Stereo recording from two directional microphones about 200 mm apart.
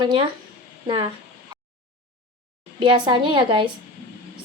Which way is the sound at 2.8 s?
20° right (ahead or behind).